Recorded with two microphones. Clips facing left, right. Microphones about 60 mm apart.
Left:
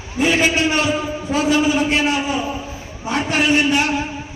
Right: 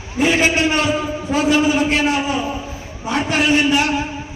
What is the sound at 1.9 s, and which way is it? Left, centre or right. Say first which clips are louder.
A man's voice: right 1 dB; centre.